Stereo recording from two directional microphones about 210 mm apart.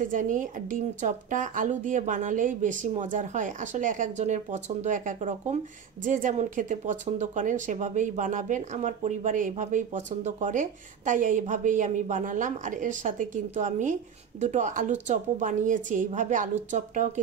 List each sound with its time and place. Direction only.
0.0 s speech: 40° right (ahead or behind)